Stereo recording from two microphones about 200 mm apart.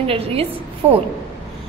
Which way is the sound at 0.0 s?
30° right (ahead or behind).